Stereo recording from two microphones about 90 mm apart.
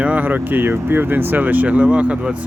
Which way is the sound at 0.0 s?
15° right (ahead or behind).